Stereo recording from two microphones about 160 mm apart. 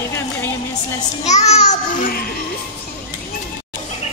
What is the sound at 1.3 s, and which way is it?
Speech, 45° left (ahead or behind).